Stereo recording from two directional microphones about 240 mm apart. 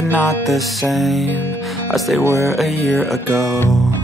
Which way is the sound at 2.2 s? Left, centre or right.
Centre.